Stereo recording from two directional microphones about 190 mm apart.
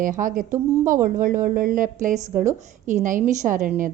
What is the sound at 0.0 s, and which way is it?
A woman's voice, 45° right (ahead or behind).